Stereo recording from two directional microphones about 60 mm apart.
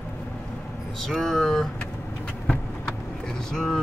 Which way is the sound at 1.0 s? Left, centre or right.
Centre.